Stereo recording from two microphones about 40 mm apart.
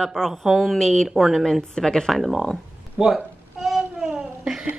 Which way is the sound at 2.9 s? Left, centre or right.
Centre.